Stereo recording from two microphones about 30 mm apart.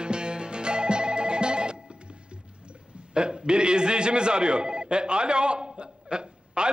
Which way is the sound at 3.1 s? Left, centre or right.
Right.